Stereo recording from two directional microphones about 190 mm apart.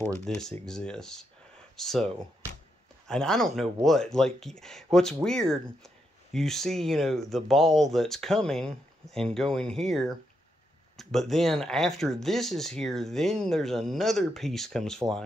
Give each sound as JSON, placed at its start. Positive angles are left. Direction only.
{"t": 0.2, "sound": "speech", "side_deg": 5}
{"t": 3.1, "sound": "speech", "side_deg": 5}